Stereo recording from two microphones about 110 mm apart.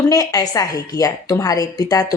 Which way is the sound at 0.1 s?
35° left (ahead or behind).